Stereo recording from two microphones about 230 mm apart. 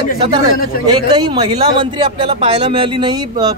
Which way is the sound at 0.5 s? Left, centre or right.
Left.